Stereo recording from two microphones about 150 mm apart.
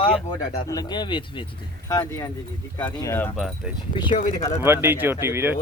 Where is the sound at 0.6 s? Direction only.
25° left (ahead or behind).